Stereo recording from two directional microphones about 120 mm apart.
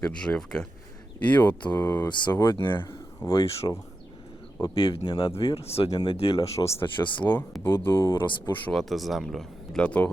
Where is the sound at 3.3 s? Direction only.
50° left (ahead or behind).